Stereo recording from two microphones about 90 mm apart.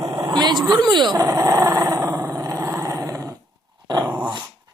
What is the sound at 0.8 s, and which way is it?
Speech, 55° right (ahead or behind).